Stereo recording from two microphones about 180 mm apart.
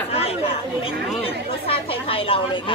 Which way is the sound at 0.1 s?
35° left (ahead or behind).